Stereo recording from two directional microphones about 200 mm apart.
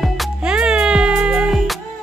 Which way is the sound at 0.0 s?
Centre (ahead or behind).